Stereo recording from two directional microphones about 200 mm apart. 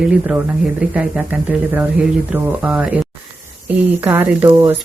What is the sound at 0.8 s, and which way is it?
Speech, 5° right (ahead or behind).